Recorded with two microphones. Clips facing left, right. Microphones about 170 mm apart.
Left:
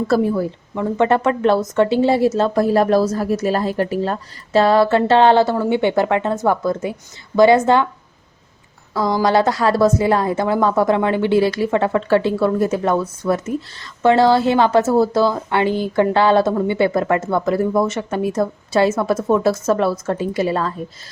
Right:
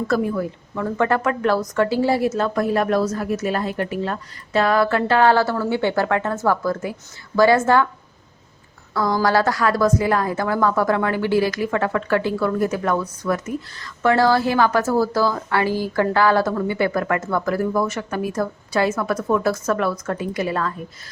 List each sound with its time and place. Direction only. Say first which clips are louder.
0.1 s a woman's voice: left 4 dB; 30° left (ahead or behind)
0.8 s a woman's voice: left 4 dB; 20° left (ahead or behind)
8.9 s a woman's voice: left 2 dB; 20° left (ahead or behind)